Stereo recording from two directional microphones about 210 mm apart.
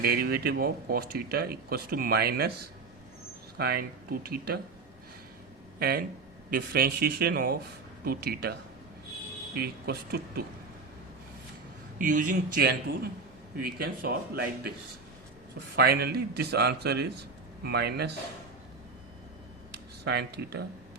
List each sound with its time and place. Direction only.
0.0 s speech: 50° right (ahead or behind)
3.6 s speech: 50° right (ahead or behind)
5.8 s speech: 50° right (ahead or behind)
9.6 s speech: 50° right (ahead or behind)
11.9 s a man's voice: 40° right (ahead or behind)
15.7 s speech: 50° right (ahead or behind)
20.1 s speech: 50° right (ahead or behind)